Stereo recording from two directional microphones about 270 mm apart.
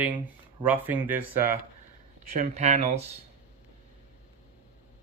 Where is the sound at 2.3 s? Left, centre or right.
Right.